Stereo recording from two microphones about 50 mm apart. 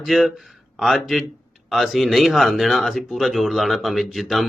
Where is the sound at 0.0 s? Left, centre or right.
Centre.